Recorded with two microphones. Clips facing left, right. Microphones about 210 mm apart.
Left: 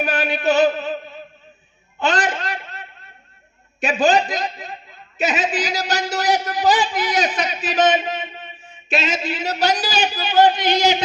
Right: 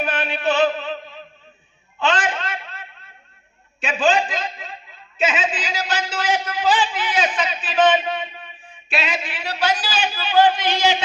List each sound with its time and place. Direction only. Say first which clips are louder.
0.0 s a man's voice: left 2 dB; 40° left (ahead or behind)
2.0 s a sound: left 1 dB; 40° left (ahead or behind)
3.8 s a man's voice: left 2 dB; 40° left (ahead or behind)